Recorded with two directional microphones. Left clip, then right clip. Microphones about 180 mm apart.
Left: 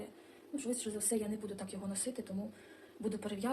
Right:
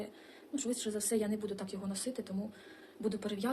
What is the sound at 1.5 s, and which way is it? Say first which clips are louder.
Speech: right 2 dB; 30° right (ahead or behind).